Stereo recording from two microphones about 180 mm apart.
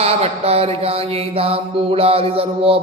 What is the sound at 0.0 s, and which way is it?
Mantra, 35° right (ahead or behind).